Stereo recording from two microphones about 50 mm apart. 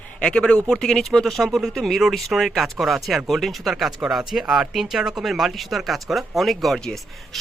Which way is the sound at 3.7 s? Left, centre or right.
Centre.